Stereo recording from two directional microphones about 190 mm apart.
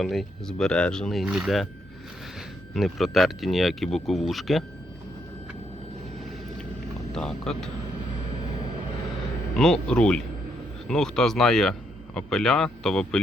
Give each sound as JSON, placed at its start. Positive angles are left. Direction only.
{"t": 0.0, "sound": "speech", "side_deg": 0}
{"t": 2.7, "sound": "speech", "side_deg": 0}
{"t": 7.1, "sound": "speech", "side_deg": 5}
{"t": 9.6, "sound": "speech", "side_deg": 5}